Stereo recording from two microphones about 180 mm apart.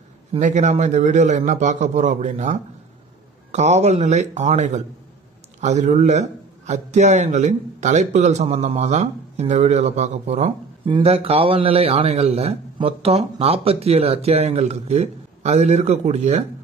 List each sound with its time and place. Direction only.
0.4 s speech: 40° right (ahead or behind)